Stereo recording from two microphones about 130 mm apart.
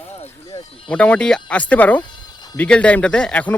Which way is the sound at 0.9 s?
10° left (ahead or behind).